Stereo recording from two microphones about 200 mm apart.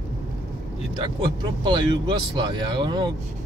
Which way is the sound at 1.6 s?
20° right (ahead or behind).